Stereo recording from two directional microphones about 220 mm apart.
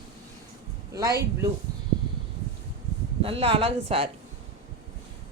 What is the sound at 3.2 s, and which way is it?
Speech, 25° right (ahead or behind).